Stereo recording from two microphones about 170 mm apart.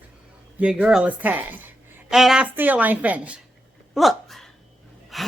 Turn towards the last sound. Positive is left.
turn(degrees=0)  # may be behind; listen again after turning